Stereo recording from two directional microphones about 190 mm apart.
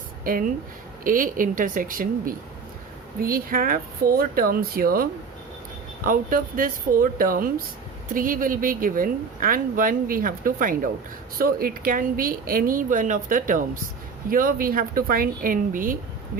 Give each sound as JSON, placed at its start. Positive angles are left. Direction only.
{"t": 0.3, "sound": "speech", "side_deg": -45}
{"t": 6.1, "sound": "speech", "side_deg": -45}